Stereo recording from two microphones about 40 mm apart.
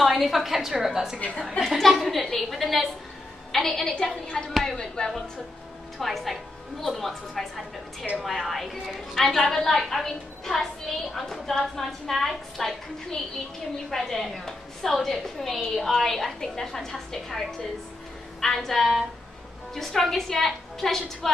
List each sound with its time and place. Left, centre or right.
0.0 s a woman's voice: centre
1.8 s a woman's voice: centre
5.9 s a woman's voice: centre